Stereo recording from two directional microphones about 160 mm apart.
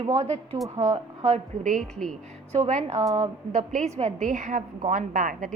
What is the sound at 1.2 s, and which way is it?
Speech, 50° right (ahead or behind).